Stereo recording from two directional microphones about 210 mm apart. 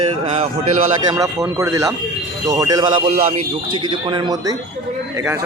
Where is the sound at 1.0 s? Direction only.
15° right (ahead or behind).